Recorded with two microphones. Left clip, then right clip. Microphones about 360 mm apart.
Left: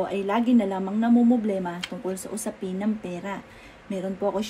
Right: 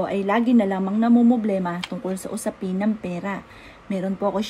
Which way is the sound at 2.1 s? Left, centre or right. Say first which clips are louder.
Right 4 dB; right.